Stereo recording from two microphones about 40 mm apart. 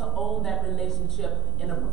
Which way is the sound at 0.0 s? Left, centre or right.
Centre.